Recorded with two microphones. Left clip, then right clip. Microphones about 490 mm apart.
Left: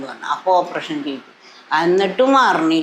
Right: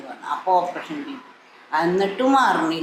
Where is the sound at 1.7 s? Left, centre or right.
Left.